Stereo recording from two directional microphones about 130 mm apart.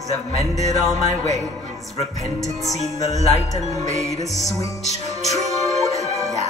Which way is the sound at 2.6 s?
60° right (ahead or behind).